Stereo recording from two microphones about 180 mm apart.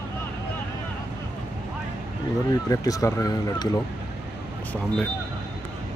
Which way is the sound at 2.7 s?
20° left (ahead or behind).